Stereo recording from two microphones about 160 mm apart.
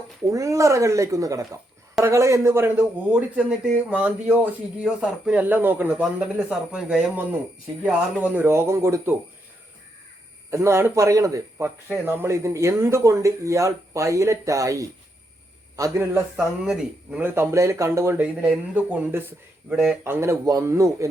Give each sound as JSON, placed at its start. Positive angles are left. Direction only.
{"t": 0.3, "sound": "speech", "side_deg": -20}
{"t": 10.5, "sound": "a man's voice", "side_deg": -15}
{"t": 16.6, "sound": "speech", "side_deg": -5}